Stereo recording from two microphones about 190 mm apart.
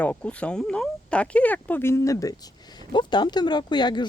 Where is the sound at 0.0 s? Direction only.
5° left (ahead or behind).